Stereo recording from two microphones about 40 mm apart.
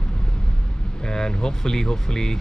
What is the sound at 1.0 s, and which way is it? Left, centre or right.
Speech, centre.